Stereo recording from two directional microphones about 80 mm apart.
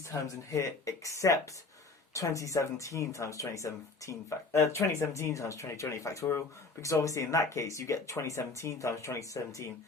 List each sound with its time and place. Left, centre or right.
0.1 s speech: left